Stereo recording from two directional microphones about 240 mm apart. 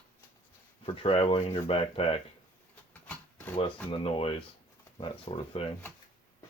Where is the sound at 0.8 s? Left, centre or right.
Left.